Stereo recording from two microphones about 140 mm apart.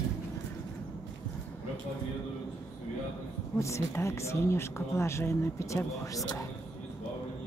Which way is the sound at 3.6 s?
20° left (ahead or behind).